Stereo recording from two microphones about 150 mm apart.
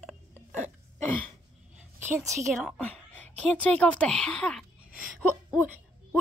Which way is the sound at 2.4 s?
5° left (ahead or behind).